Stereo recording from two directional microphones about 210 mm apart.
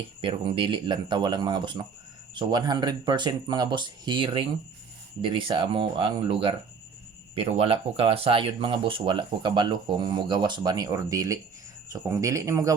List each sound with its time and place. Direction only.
0.2 s speech: 25° right (ahead or behind)